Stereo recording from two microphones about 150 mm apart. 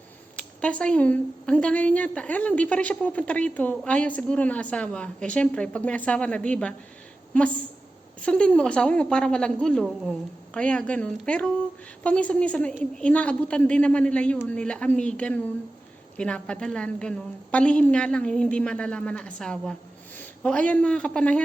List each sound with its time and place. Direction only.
0.3 s a woman's voice: 10° left (ahead or behind)